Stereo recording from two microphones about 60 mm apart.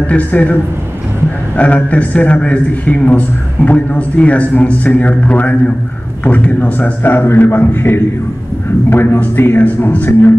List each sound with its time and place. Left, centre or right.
0.0 s a man's voice: left
1.6 s a man's voice: left
9.6 s a man's voice: left